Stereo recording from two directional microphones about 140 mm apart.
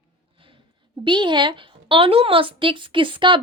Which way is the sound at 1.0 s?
35° right (ahead or behind).